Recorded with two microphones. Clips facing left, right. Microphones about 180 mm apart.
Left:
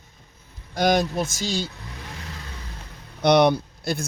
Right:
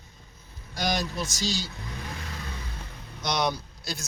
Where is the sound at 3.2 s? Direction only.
60° left (ahead or behind).